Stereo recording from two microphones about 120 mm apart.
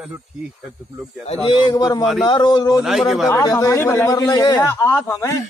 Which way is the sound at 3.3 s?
30° left (ahead or behind).